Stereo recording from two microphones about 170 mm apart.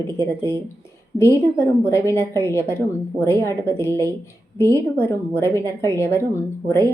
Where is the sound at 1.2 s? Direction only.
15° left (ahead or behind).